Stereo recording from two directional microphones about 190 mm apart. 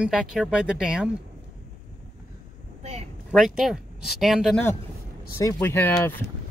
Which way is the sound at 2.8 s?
35° right (ahead or behind).